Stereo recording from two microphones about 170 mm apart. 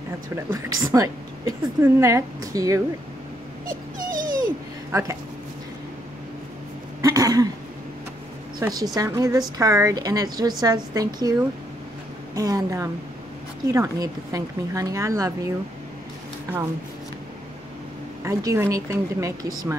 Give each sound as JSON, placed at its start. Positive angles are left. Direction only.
{"t": 0.5, "sound": "a woman's voice", "side_deg": -20}
{"t": 3.6, "sound": "dog", "side_deg": -55}
{"t": 7.0, "sound": "cough", "side_deg": -20}
{"t": 8.5, "sound": "a woman's voice", "side_deg": -20}
{"t": 12.4, "sound": "a woman's voice", "side_deg": -20}
{"t": 18.2, "sound": "speech", "side_deg": -15}